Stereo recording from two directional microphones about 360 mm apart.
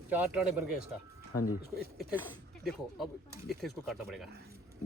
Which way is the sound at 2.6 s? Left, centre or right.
Centre.